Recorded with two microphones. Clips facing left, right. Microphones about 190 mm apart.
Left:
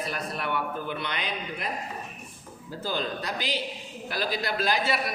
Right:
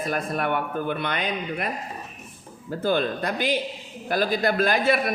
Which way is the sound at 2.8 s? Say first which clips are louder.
Right 7 dB; 55° right (ahead or behind).